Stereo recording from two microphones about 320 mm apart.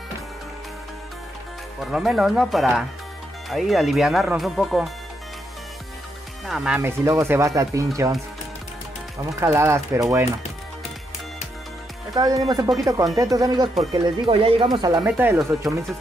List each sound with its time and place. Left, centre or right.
1.8 s speech: centre
6.4 s speech: centre
9.2 s speech: centre
12.1 s speech: centre